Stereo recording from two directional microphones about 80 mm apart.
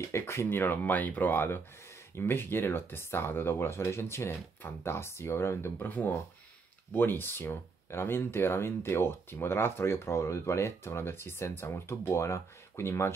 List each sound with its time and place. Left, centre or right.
0.1 s speech: left